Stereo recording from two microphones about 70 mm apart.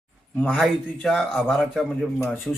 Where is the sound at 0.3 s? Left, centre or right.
Centre.